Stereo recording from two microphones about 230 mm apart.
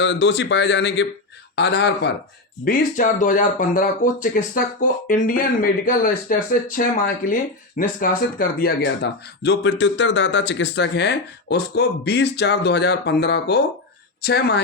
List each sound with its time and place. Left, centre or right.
0.0 s speech: left
2.6 s speech: left